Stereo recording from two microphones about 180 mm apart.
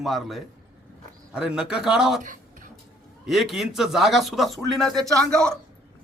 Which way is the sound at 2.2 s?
45° right (ahead or behind).